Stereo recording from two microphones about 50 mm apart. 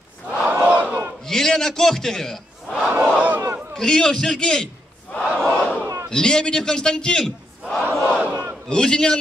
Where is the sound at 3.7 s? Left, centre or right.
Centre.